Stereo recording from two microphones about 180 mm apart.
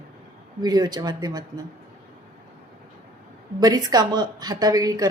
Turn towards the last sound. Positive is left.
turn(degrees=-20)  # may be behind; listen again after turning